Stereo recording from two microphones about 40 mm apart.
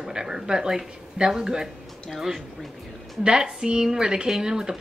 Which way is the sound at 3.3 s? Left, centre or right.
Centre.